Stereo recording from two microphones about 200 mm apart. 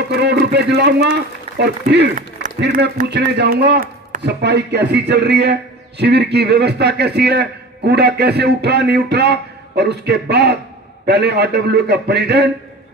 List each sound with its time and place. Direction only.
0.1 s a man's voice: 55° right (ahead or behind)